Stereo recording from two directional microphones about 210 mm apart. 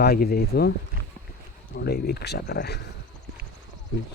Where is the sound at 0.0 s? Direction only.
50° left (ahead or behind).